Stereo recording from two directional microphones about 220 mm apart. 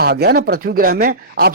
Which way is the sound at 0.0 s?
45° right (ahead or behind).